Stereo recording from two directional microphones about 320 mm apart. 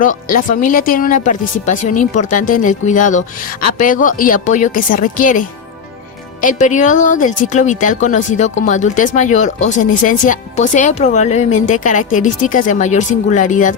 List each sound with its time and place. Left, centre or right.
0.0 s speech: left